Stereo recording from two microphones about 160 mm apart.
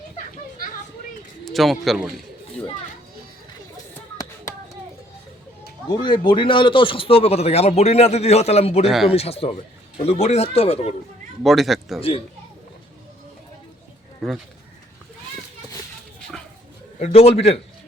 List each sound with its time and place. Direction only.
1.5 s speech: centre (ahead or behind)
5.9 s speech: 30° left (ahead or behind)
8.8 s speech: centre (ahead or behind)
9.0 s speech: 40° left (ahead or behind)
11.4 s speech: centre (ahead or behind)
11.9 s speech: 35° left (ahead or behind)
17.0 s speech: 40° left (ahead or behind)